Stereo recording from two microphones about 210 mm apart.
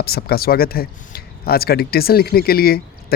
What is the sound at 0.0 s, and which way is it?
Speech, 50° left (ahead or behind).